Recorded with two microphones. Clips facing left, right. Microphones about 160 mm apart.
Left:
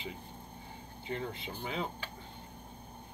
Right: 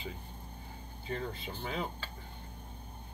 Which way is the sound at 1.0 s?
20° left (ahead or behind).